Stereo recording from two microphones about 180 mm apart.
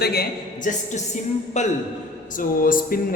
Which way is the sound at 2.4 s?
50° left (ahead or behind).